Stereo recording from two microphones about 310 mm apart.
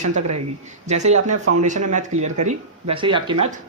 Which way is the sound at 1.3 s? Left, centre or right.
Right.